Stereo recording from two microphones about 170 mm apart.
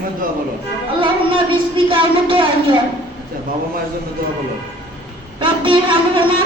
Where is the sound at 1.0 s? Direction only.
30° right (ahead or behind).